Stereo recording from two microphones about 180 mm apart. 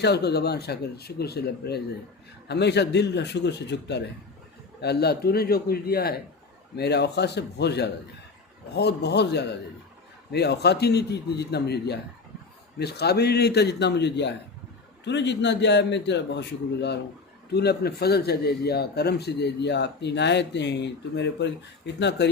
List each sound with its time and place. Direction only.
0.0 s a man's voice: 65° left (ahead or behind)